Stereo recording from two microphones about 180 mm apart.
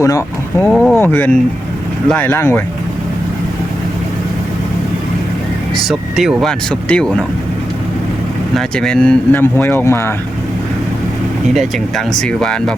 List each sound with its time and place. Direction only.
0.0 s speech: 15° left (ahead or behind)
0.6 s speech: centre (ahead or behind)
5.7 s speech: centre (ahead or behind)
8.5 s speech: 5° left (ahead or behind)
11.5 s speech: centre (ahead or behind)